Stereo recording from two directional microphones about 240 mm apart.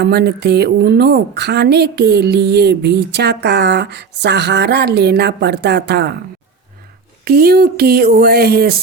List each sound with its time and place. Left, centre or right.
0.0 s a woman's voice: right
7.3 s speech: right